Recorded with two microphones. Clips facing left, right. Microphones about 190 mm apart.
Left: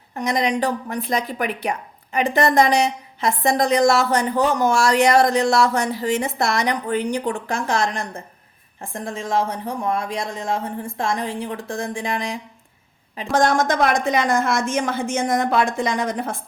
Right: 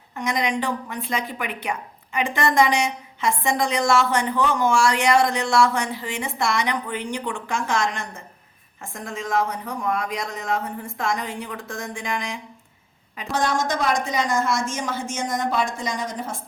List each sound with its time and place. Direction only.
0.2 s a woman's voice: 35° left (ahead or behind)
13.3 s a woman's voice: 50° left (ahead or behind)